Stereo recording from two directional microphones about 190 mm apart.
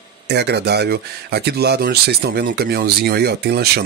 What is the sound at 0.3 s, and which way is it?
Speech, 60° right (ahead or behind).